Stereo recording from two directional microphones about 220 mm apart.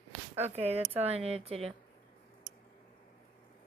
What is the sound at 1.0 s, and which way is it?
Speech, 30° right (ahead or behind).